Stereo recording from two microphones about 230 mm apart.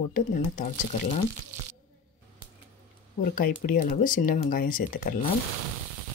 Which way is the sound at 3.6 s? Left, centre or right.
Left.